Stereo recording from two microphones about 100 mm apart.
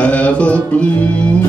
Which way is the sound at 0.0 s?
15° left (ahead or behind).